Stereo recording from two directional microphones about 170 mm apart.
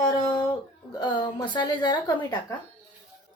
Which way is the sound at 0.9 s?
25° left (ahead or behind).